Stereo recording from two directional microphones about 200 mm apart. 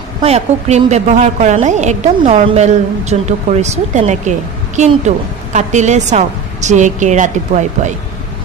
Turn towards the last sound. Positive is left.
turn(degrees=-35)  # may be behind; listen again after turning